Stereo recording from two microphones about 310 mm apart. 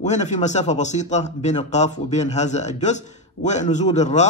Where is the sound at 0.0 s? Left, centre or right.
Left.